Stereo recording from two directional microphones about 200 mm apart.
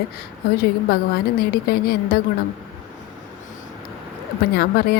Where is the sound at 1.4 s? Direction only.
50° left (ahead or behind).